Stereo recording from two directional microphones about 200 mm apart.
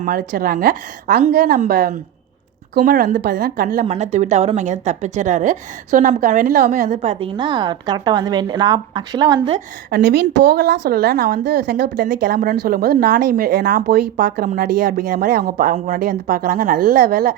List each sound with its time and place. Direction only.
0.0 s speech: 45° right (ahead or behind)
3.8 s a woman's voice: 35° right (ahead or behind)
10.0 s speech: 60° right (ahead or behind)
12.4 s speech: 45° right (ahead or behind)